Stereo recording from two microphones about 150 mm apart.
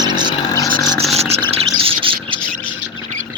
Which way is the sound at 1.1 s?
45° right (ahead or behind).